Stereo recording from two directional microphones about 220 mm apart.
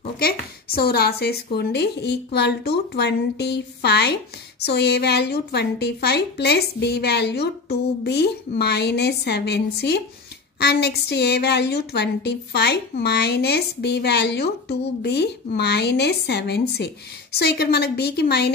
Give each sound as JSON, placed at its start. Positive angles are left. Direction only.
{"t": 0.7, "sound": "a woman's voice", "side_deg": 45}